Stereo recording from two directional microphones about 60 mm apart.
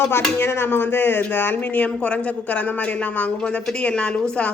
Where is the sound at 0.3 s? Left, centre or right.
Left.